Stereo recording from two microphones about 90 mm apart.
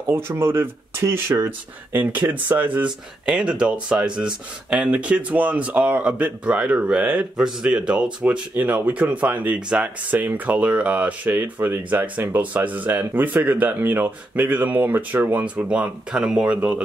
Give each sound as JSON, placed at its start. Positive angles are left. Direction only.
{"t": 0.1, "sound": "speech", "side_deg": -30}